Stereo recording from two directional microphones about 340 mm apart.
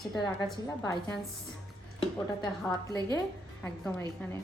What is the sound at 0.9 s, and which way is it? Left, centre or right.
Speech, centre.